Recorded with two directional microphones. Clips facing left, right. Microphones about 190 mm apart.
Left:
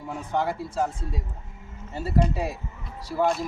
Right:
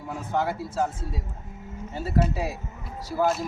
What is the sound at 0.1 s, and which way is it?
Speech, centre (ahead or behind).